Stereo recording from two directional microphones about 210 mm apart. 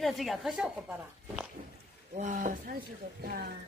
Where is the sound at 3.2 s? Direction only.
50° right (ahead or behind).